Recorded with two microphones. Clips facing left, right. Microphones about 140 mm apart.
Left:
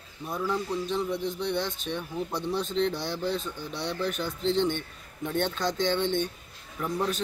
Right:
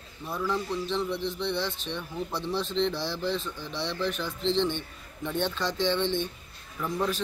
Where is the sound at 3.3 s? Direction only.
45° left (ahead or behind).